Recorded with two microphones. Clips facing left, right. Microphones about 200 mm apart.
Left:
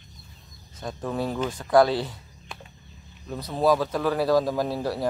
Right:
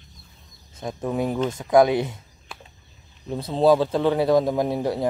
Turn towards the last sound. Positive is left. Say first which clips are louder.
# right 3 dB
turn(degrees=-20)  # may be behind; listen again after turning